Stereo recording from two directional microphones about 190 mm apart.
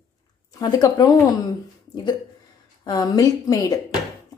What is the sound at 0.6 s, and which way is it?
Speech, 20° left (ahead or behind).